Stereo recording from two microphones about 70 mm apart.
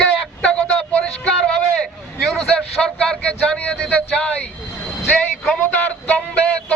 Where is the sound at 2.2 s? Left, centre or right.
Centre.